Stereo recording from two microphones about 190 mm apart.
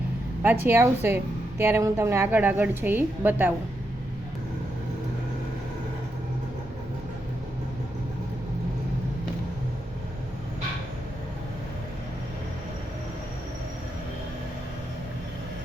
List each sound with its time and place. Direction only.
0.4 s a woman's voice: 10° right (ahead or behind)